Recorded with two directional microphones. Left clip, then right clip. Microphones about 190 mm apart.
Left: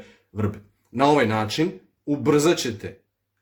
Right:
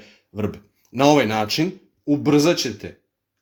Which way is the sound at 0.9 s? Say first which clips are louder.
Right 2 dB; 35° right (ahead or behind).